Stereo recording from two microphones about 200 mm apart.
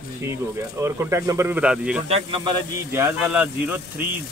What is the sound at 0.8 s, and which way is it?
Speech, 15° right (ahead or behind).